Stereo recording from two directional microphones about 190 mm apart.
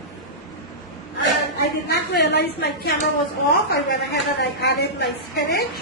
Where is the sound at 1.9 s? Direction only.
60° left (ahead or behind).